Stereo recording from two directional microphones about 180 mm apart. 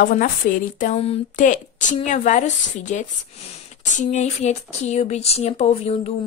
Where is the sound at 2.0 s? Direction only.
45° left (ahead or behind).